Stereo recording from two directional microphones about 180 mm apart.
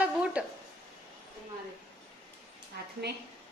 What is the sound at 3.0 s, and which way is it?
Speech, 65° right (ahead or behind).